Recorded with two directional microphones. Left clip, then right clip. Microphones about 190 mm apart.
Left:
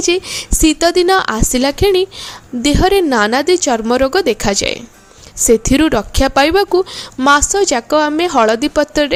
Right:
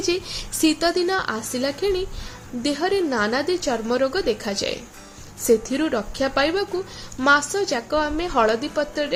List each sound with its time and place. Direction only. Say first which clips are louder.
0.6 s a woman's voice: left 8 dB; 40° left (ahead or behind)